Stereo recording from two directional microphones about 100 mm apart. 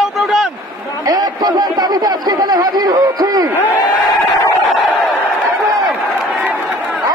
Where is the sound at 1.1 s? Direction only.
40° right (ahead or behind).